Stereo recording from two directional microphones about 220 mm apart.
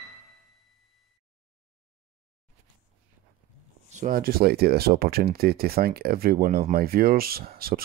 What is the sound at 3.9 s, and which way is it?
Speech, 35° right (ahead or behind).